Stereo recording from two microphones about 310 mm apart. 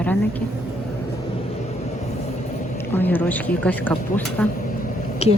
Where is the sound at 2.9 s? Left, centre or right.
Centre.